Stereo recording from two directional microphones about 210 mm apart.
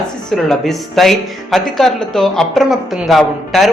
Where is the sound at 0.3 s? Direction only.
Centre (ahead or behind).